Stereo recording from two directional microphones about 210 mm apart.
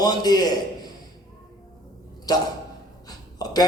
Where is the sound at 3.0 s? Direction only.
20° left (ahead or behind).